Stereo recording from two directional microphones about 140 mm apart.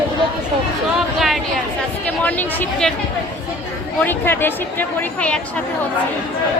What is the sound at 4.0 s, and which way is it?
A woman's voice, 15° left (ahead or behind).